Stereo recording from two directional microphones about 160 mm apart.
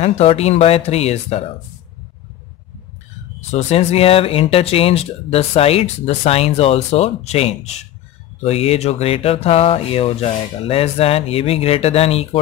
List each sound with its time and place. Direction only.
0.0 s speech: 40° left (ahead or behind)
3.3 s speech: 40° left (ahead or behind)